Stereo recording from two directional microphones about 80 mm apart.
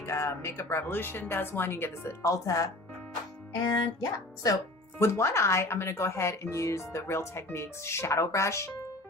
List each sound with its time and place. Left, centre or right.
0.0 s speech: left
2.3 s speech: left
3.6 s music: left
4.9 s speech: left